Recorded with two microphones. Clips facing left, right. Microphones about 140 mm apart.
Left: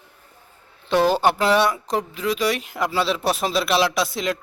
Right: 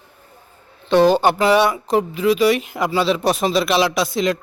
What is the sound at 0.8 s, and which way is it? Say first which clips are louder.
Speech: right 4 dB; 5° left (ahead or behind).